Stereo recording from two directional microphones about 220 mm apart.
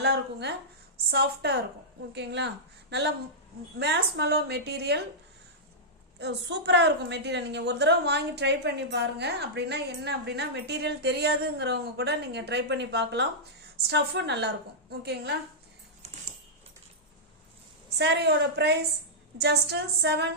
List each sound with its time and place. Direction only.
0.0 s a woman's voice: 50° right (ahead or behind)
3.8 s a woman's voice: 50° right (ahead or behind)
6.1 s a woman's voice: 50° right (ahead or behind)
17.9 s a woman's voice: 50° right (ahead or behind)